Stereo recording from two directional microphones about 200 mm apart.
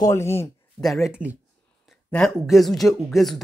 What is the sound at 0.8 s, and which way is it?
Speech, centre (ahead or behind).